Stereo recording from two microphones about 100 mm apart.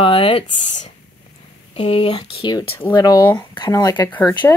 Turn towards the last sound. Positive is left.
turn(degrees=15)  # may be behind; listen again after turning